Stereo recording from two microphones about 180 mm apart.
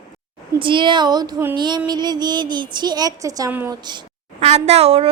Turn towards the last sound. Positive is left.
turn(degrees=-35)  # may be behind; listen again after turning